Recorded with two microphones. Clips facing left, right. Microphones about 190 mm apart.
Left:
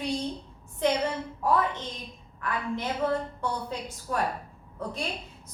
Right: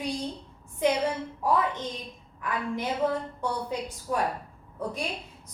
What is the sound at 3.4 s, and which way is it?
Speech, 15° right (ahead or behind).